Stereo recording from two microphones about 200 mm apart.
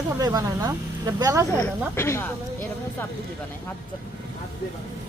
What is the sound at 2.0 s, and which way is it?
Speech, 10° left (ahead or behind).